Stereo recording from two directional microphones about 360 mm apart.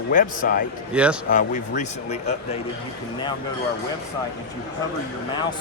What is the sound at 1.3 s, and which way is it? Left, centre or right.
Speech, left.